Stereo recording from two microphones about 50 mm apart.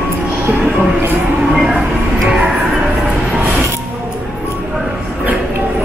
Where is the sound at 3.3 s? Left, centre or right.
Right.